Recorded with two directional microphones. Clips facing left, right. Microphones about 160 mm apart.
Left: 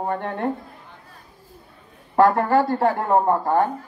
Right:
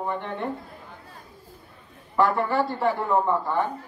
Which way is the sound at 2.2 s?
45° left (ahead or behind).